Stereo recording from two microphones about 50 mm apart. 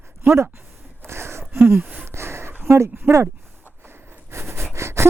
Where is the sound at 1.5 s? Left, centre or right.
Right.